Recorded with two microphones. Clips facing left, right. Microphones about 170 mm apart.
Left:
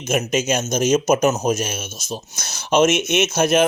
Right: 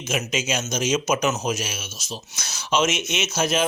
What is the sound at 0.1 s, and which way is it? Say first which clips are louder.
A man's voice: left 6 dB; 50° left (ahead or behind).